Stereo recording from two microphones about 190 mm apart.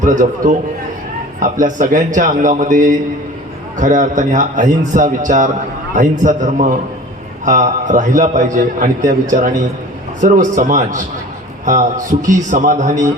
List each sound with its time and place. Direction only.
0.0 s a man's voice: 40° right (ahead or behind)